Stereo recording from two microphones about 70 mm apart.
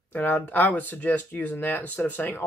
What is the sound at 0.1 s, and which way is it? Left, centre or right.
Speech, left.